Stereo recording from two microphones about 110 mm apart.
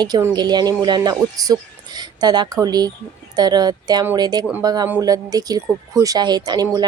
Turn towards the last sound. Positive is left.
turn(degrees=-35)  # may be behind; listen again after turning